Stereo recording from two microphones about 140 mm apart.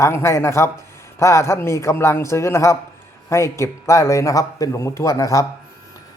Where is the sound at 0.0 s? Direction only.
20° left (ahead or behind).